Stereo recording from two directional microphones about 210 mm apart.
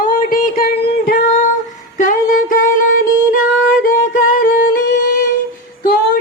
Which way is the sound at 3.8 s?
40° left (ahead or behind).